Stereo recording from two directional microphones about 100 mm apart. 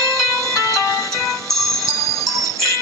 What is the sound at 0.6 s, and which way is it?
Music, 35° left (ahead or behind).